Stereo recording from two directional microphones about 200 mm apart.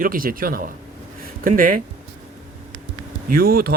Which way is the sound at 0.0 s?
45° right (ahead or behind).